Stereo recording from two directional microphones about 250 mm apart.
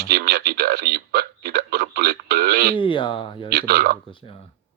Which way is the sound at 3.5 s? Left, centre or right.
Right.